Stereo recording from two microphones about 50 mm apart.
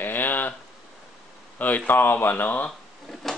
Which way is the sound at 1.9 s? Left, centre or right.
Left.